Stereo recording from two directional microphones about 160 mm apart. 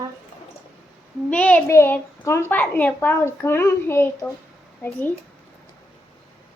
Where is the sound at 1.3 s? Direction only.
10° left (ahead or behind).